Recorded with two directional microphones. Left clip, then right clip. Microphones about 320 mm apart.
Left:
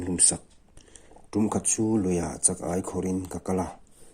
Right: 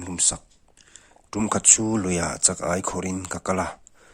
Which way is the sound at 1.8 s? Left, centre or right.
Right.